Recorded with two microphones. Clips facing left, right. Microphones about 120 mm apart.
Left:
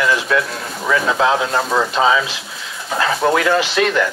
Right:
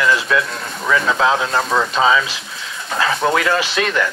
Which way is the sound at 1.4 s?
10° left (ahead or behind).